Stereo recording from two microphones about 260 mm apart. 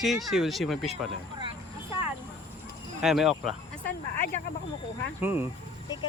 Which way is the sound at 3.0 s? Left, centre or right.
Centre.